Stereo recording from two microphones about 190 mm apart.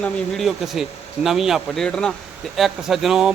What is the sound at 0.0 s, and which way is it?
A man's voice, centre (ahead or behind).